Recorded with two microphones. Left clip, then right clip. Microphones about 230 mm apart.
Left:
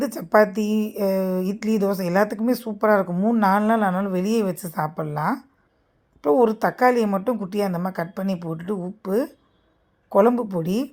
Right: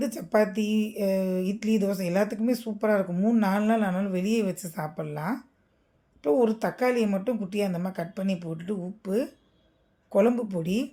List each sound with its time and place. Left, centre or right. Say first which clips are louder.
0.0 s speech: left 7 dB; centre